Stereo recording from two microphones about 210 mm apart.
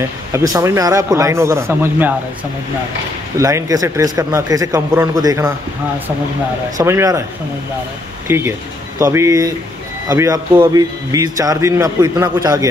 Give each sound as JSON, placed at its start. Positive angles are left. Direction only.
{"t": 0.3, "sound": "a man's voice", "side_deg": -15}
{"t": 3.3, "sound": "a man's voice", "side_deg": -15}
{"t": 6.8, "sound": "a man's voice", "side_deg": -15}
{"t": 8.3, "sound": "a man's voice", "side_deg": -10}